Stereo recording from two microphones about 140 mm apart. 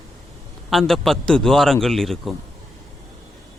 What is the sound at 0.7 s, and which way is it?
Speech, centre (ahead or behind).